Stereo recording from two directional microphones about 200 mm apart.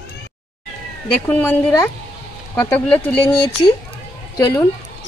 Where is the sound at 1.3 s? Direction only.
10° left (ahead or behind).